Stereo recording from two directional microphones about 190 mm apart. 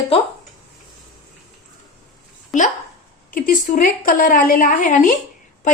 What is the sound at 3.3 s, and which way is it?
A woman's voice, 45° left (ahead or behind).